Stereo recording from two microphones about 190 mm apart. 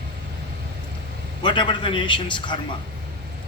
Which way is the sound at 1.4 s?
25° left (ahead or behind).